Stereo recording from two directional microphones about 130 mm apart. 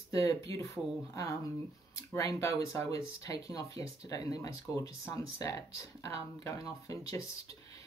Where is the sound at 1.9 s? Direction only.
25° left (ahead or behind).